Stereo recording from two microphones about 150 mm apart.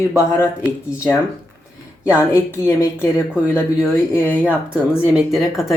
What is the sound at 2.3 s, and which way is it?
A woman's voice, 15° left (ahead or behind).